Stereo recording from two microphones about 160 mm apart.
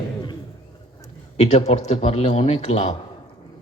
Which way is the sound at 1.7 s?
45° left (ahead or behind).